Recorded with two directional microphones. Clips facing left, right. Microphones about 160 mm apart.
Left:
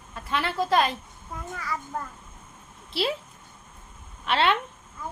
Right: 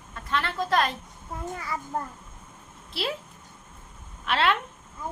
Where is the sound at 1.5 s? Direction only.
25° right (ahead or behind).